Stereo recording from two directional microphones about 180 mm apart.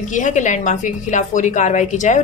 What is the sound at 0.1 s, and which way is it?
A woman's voice, 45° left (ahead or behind).